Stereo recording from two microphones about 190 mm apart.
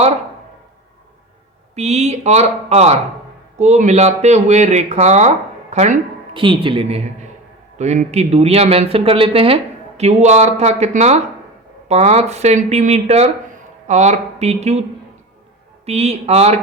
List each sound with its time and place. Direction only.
1.7 s speech: 35° right (ahead or behind)
15.9 s speech: 35° right (ahead or behind)